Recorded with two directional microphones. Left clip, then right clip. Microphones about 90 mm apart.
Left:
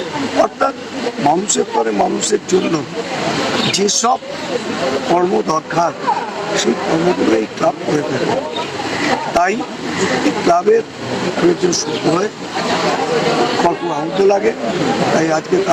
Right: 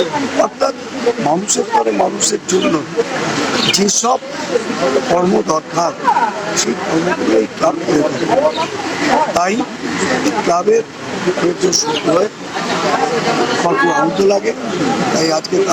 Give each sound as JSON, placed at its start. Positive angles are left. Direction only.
{"t": 0.2, "sound": "speech", "side_deg": -25}